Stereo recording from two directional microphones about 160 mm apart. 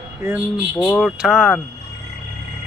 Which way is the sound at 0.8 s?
Centre (ahead or behind).